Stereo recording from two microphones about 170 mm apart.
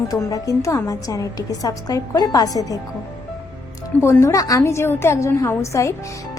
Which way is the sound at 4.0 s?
15° left (ahead or behind).